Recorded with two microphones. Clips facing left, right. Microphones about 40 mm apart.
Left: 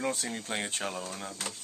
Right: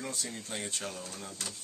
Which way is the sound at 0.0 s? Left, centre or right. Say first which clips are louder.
Left 6 dB; left.